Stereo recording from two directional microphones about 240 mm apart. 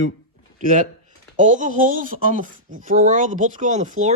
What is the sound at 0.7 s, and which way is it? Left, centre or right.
Speech, right.